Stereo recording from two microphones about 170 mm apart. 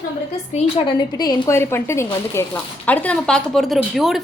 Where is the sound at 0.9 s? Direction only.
25° left (ahead or behind); by 4.2 s centre (ahead or behind).